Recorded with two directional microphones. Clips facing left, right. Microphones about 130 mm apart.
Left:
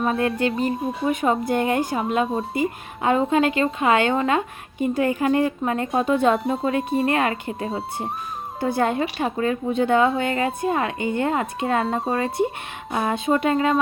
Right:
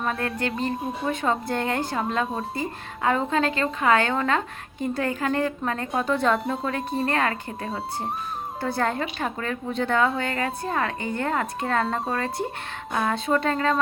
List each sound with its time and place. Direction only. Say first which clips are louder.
0.0 s speech: left 6 dB; 25° left (ahead or behind)
0.5 s speech: left 4 dB; centre (ahead or behind)
1.0 s speech: left 5 dB; 15° left (ahead or behind)